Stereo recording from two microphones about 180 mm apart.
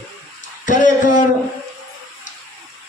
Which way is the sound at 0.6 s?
45° left (ahead or behind).